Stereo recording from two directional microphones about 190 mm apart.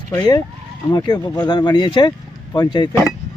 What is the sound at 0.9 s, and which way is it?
Speech, 20° left (ahead or behind).